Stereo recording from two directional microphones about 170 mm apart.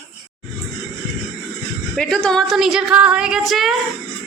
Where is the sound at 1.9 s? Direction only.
5° left (ahead or behind).